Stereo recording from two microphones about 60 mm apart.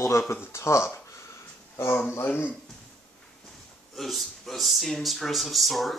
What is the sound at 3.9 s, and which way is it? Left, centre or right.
Speech, centre.